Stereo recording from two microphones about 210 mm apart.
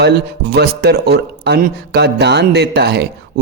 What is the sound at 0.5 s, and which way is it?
A man's voice, 50° right (ahead or behind).